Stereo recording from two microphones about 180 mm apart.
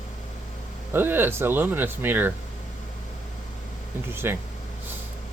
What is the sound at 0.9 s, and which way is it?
Speech, 10° right (ahead or behind).